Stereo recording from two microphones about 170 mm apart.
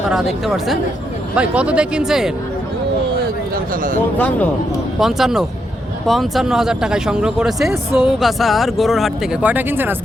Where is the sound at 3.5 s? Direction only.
55° right (ahead or behind).